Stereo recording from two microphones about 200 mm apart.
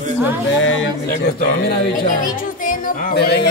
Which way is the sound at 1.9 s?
45° left (ahead or behind).